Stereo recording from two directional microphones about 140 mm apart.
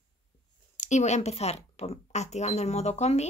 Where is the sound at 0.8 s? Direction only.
55° left (ahead or behind).